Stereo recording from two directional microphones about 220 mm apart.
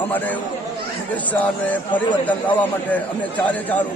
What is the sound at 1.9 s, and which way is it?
A man's voice, 5° left (ahead or behind).